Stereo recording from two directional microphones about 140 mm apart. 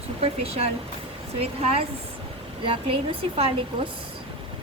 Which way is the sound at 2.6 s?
35° right (ahead or behind).